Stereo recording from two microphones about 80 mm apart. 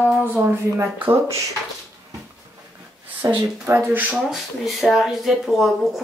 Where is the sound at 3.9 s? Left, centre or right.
Right.